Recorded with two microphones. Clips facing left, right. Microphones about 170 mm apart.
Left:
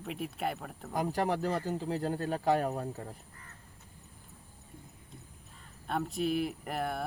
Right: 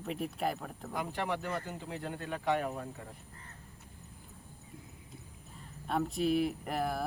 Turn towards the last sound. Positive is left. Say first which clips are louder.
# right 1 dB
turn(degrees=0)  # may be behind; listen again after turning